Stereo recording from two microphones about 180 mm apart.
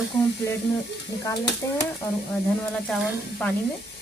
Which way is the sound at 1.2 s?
15° left (ahead or behind).